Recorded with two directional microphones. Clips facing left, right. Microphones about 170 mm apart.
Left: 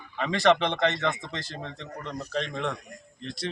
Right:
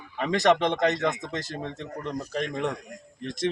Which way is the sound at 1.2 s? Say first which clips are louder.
Right 4 dB; 45° right (ahead or behind).